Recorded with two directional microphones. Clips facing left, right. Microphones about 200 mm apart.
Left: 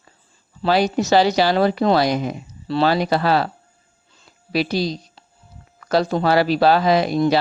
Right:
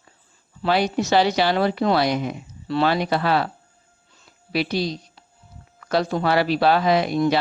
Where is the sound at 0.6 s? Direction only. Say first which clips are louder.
Left 3 dB; 35° left (ahead or behind).